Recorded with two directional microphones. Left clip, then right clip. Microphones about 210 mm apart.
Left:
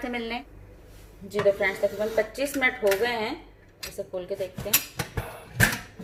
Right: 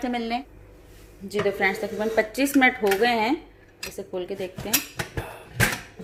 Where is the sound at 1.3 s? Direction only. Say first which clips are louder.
Even; 60° right (ahead or behind).